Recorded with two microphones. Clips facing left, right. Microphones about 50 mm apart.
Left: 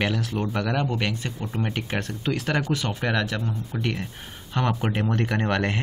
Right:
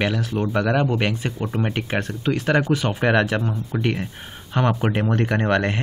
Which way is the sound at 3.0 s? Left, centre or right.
Right.